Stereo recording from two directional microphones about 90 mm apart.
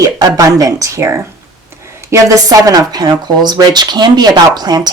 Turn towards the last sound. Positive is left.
turn(degrees=-50)  # may be behind; listen again after turning